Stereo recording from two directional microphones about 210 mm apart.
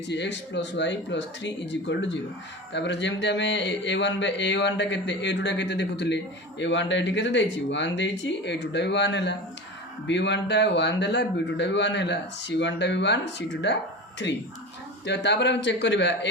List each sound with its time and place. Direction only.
0.1 s speech: 55° left (ahead or behind)